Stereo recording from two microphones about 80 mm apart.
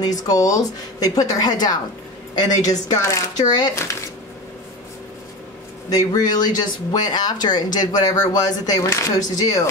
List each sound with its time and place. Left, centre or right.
0.0 s a woman's voice: left
3.4 s speech: left
5.9 s speech: left